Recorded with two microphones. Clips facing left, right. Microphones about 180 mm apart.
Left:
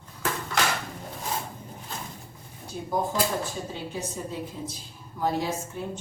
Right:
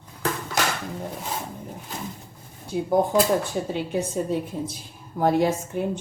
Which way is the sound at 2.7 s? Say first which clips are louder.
Right 10 dB; 70° right (ahead or behind).